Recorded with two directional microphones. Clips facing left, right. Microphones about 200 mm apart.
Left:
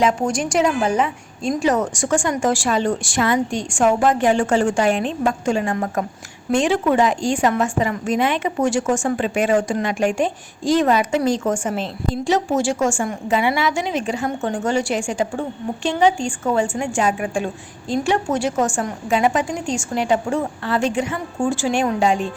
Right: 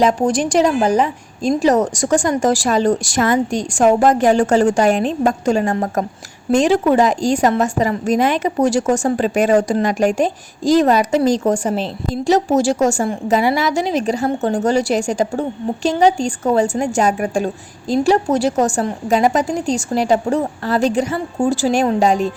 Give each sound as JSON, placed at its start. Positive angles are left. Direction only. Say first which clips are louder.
{"t": 0.0, "sound": "a woman's voice", "louder": "right 4 dB", "side_deg": -35}